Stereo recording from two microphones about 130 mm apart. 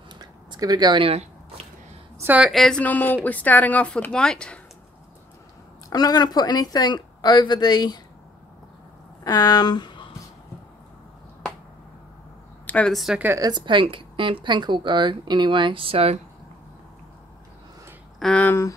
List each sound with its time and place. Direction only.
0.2 s a sound: 30° right (ahead or behind); by 1.7 s 45° right (ahead or behind)
2.1 s a woman's voice: 10° right (ahead or behind)
2.5 s a woman's voice: 5° left (ahead or behind)
5.9 s speech: 30° left (ahead or behind)
9.2 s speech: 30° left (ahead or behind)
12.6 s speech: 10° left (ahead or behind)
13.4 s a woman's voice: 35° right (ahead or behind)
18.2 s a woman's voice: 10° left (ahead or behind)